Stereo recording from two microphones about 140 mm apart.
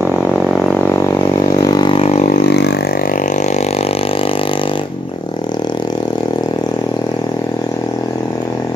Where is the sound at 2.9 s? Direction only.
80° left; by 6.0 s 30° left (ahead or behind).